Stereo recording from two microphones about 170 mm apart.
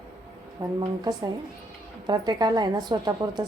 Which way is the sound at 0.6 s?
25° right (ahead or behind).